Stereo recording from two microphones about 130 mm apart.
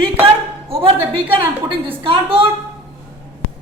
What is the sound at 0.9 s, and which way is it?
A woman's voice, 45° right (ahead or behind).